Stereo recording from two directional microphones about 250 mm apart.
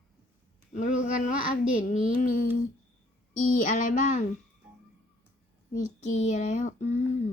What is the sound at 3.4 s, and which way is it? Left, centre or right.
Speech, left.